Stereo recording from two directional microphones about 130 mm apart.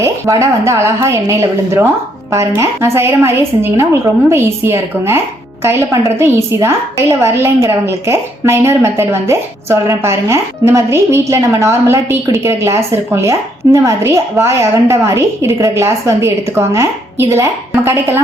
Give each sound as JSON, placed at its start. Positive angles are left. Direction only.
{"t": 0.0, "sound": "a woman's voice", "side_deg": -20}